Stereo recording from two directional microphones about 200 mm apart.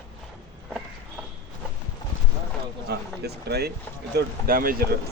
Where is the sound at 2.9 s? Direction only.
55° right (ahead or behind).